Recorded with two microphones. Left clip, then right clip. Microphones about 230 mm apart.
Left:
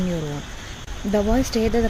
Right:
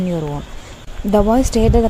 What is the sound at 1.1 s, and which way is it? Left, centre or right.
Speech, right.